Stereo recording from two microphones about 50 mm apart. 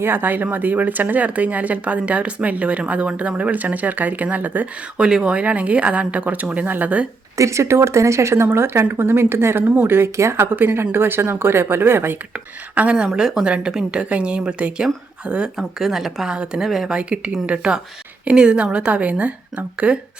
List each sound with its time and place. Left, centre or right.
0.0 s speech: right
4.9 s a woman's voice: centre
5.4 s a woman's voice: right
7.3 s speech: right
8.5 s speech: right
9.6 s speech: right
9.9 s speech: right
10.5 s speech: right
12.7 s a woman's voice: right
15.5 s speech: centre
16.2 s a woman's voice: centre
16.9 s a woman's voice: right